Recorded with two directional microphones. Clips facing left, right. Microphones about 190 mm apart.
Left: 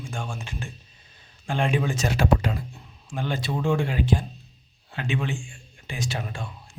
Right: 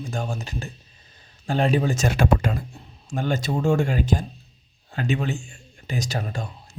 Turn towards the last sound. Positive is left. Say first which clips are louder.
# right 2 dB
turn(degrees=-40)  # may be behind; listen again after turning